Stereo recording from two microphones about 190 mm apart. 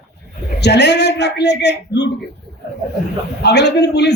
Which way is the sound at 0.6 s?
65° left (ahead or behind).